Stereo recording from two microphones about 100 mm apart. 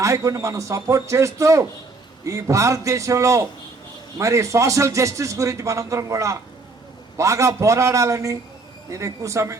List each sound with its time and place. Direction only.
0.0 s speech: 35° right (ahead or behind)